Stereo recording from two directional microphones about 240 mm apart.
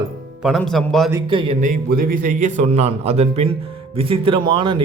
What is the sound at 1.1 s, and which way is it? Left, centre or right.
Speech, right.